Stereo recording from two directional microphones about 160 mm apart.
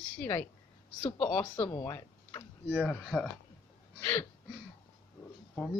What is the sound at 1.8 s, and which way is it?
Speech, 20° left (ahead or behind).